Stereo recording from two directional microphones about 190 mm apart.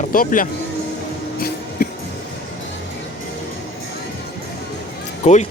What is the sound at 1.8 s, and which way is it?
Music, 50° left (ahead or behind).